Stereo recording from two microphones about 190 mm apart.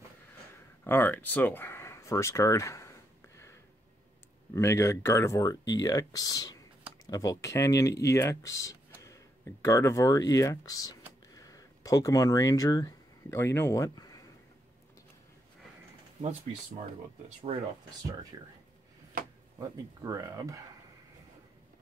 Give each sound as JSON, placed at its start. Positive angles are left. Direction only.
{"t": 0.8, "sound": "speech", "side_deg": 10}
{"t": 4.6, "sound": "speech", "side_deg": 15}
{"t": 17.5, "sound": "speech", "side_deg": -35}
{"t": 18.3, "sound": "speech", "side_deg": -20}
{"t": 19.6, "sound": "speech", "side_deg": -20}